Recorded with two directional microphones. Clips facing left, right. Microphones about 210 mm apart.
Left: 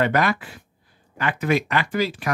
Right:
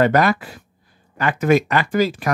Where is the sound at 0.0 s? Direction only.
40° right (ahead or behind).